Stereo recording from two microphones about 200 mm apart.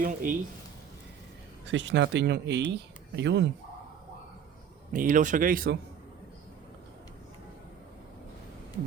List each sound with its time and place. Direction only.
0.0 s speech: 45° right (ahead or behind)
1.6 s speech: 65° right (ahead or behind)
4.9 s speech: 40° right (ahead or behind)